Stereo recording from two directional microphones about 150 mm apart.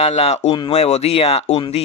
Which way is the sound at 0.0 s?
45° left (ahead or behind).